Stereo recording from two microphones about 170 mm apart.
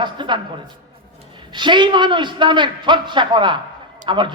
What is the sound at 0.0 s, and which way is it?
Speech, 25° right (ahead or behind).